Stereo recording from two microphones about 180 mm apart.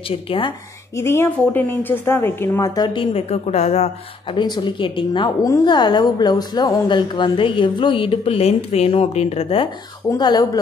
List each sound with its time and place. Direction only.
0.1 s speech: 30° left (ahead or behind)
0.9 s a woman's voice: 15° left (ahead or behind); by 4.4 s 35° left (ahead or behind)
4.4 s a woman's voice: 25° left (ahead or behind)